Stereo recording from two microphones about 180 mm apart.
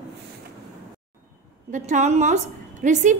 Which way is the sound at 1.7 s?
45° right (ahead or behind).